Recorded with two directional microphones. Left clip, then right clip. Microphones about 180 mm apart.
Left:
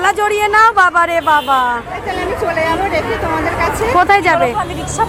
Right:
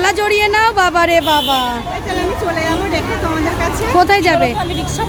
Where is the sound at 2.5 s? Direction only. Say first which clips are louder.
Left 2 dB; 45° right (ahead or behind).